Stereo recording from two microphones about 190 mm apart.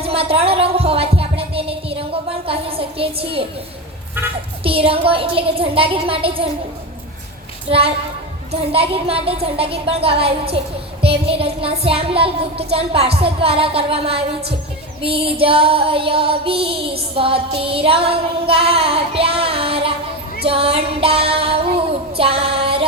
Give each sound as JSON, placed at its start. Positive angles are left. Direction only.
{"t": 0.0, "sound": "music", "side_deg": -30}
{"t": 4.6, "sound": "child singing", "side_deg": -30}
{"t": 7.7, "sound": "music", "side_deg": -30}
{"t": 15.0, "sound": "child singing", "side_deg": -30}